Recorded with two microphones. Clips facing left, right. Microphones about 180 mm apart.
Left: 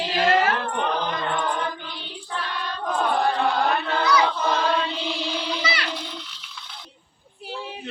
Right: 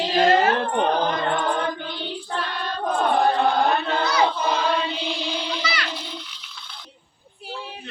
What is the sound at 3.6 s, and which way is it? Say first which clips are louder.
Choir: even; 25° right (ahead or behind).